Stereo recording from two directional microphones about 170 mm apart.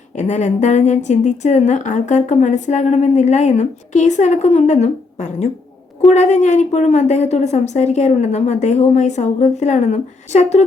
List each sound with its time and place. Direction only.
0.2 s a woman's voice: 45° left (ahead or behind)